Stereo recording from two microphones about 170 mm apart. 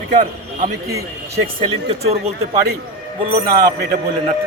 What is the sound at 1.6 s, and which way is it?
Speech, 40° right (ahead or behind).